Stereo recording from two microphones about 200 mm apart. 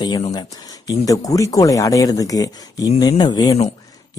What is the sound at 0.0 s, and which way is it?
Speech, 20° left (ahead or behind).